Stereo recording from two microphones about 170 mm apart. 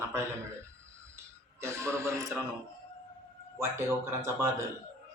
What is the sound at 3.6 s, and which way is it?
Speech, 15° right (ahead or behind).